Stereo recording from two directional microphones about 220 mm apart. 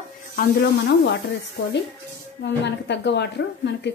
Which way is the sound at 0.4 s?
50° left (ahead or behind).